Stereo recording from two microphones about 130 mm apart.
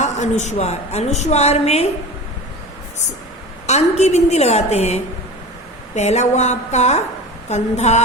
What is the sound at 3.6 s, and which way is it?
A woman's voice, 60° left (ahead or behind).